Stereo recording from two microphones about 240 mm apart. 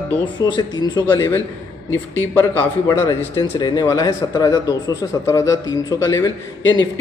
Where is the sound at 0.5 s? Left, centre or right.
Centre.